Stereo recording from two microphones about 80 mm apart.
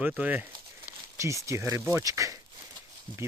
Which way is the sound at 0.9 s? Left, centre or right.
Right.